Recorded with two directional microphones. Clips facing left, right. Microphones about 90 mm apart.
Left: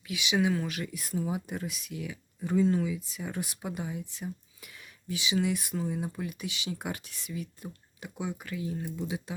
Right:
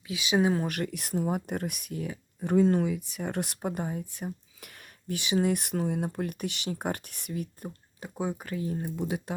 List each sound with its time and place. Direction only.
0.1 s speech: 30° right (ahead or behind)
0.7 s speech: 60° right (ahead or behind); by 2.1 s 45° right (ahead or behind)
2.4 s speech: 55° right (ahead or behind)
8.0 s speech: 35° right (ahead or behind); by 9.3 s 50° right (ahead or behind)